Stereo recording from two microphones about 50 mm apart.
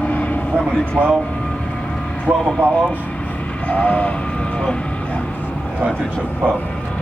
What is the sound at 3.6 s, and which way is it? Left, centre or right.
Speech, left.